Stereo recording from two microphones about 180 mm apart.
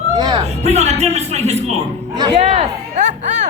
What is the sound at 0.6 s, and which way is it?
Speech, 35° right (ahead or behind).